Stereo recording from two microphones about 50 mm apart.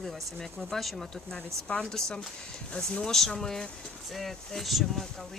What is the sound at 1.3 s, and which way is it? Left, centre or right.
Speech, centre.